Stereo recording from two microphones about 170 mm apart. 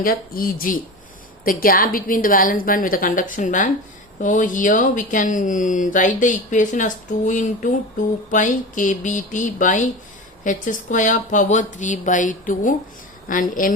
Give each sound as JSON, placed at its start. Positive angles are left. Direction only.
{"t": 0.0, "sound": "a woman's voice", "side_deg": 55}